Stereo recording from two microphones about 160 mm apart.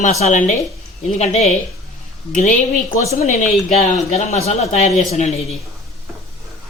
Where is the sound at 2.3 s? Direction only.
55° left (ahead or behind).